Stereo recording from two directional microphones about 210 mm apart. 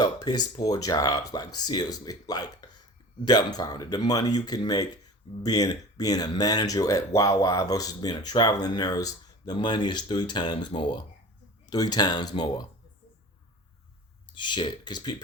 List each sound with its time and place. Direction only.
0.0 s speech: 20° left (ahead or behind)
14.3 s speech: 20° left (ahead or behind)